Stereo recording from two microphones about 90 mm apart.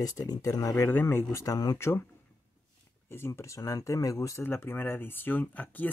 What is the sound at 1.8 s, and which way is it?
Speech, 30° left (ahead or behind).